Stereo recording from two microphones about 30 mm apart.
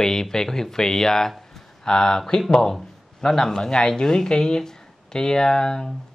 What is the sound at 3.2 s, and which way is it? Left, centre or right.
Speech, centre.